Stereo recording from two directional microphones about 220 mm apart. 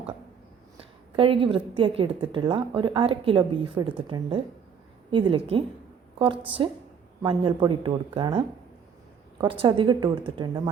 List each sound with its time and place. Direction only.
0.8 s a woman's voice: 25° right (ahead or behind)